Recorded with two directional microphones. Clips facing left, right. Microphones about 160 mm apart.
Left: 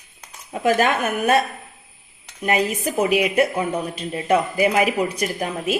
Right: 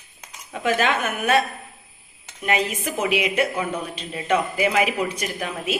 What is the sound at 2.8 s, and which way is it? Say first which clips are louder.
A woman's voice: left 4 dB; 35° left (ahead or behind).